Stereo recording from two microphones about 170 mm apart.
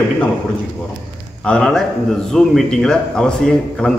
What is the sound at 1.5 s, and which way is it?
Speech, 5° left (ahead or behind).